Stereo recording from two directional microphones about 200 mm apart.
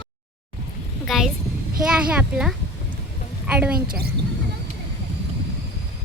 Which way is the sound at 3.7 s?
50° right (ahead or behind).